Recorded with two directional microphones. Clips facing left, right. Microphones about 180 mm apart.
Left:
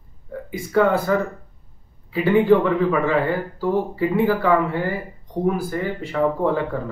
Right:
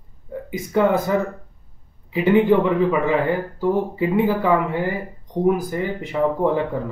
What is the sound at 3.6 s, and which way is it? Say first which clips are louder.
A man's voice: even; 15° right (ahead or behind).